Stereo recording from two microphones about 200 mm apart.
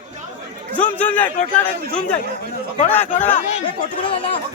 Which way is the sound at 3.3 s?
35° left (ahead or behind).